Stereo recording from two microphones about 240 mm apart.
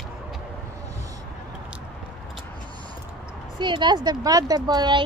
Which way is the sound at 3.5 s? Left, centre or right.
Centre.